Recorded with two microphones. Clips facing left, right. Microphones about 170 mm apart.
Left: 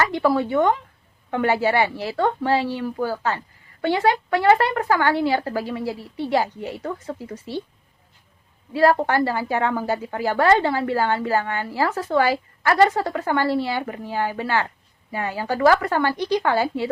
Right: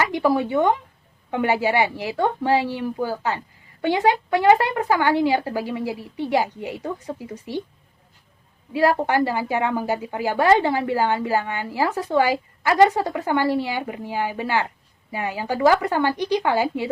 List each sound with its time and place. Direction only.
0.0 s a woman's voice: 15° right (ahead or behind)
8.7 s a woman's voice: 15° right (ahead or behind)